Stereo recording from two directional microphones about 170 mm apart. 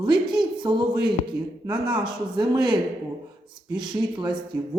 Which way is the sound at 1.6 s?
25° right (ahead or behind).